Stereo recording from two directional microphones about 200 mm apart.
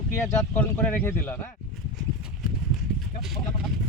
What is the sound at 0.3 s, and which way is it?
Speech, 10° left (ahead or behind).